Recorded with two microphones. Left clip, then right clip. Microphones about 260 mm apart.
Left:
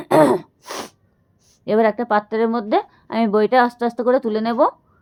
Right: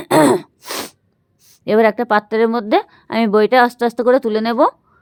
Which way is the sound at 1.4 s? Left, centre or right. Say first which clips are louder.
Right 4 dB; right.